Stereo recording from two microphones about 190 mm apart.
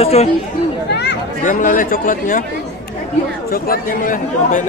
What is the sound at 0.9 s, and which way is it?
Speech, 65° left (ahead or behind).